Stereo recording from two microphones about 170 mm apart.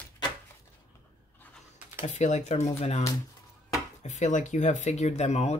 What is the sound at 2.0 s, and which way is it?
Speech, 45° left (ahead or behind).